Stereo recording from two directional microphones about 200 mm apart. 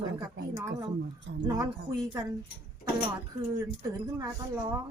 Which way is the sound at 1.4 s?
15° right (ahead or behind).